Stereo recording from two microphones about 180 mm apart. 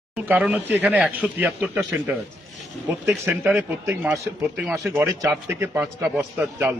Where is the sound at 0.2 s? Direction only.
10° right (ahead or behind).